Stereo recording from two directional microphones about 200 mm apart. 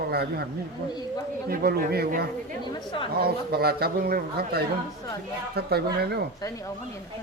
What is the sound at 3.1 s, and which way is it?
A man's voice, 50° right (ahead or behind).